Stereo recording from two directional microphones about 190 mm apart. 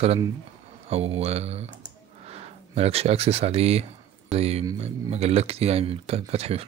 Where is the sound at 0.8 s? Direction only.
35° right (ahead or behind).